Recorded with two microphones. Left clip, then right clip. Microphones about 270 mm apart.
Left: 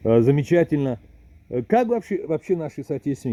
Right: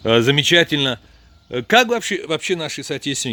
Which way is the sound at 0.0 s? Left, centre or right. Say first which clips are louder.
Right 3 dB; centre.